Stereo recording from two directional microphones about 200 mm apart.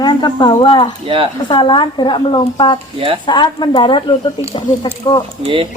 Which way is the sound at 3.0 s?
25° right (ahead or behind).